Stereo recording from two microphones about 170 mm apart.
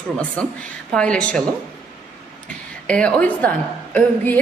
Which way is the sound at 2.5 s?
5° left (ahead or behind).